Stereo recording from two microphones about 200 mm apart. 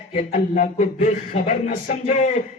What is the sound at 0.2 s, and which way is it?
Speech, 40° left (ahead or behind).